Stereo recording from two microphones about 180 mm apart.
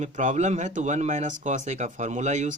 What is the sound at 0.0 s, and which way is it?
Speech, 40° right (ahead or behind).